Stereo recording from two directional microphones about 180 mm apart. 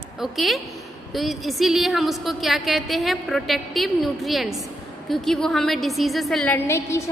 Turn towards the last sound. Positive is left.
turn(degrees=15)  # may be behind; listen again after turning